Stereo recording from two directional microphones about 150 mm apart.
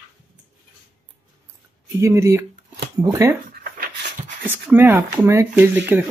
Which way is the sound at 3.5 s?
75° right (ahead or behind).